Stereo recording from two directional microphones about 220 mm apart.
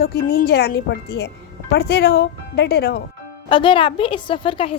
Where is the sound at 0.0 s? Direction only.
45° left (ahead or behind).